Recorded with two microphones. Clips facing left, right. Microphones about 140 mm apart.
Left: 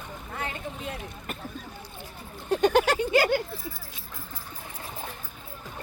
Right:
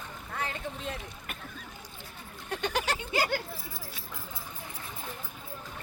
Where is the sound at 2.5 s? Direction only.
45° left (ahead or behind).